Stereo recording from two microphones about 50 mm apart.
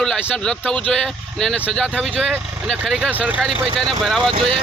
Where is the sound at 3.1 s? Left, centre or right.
Right.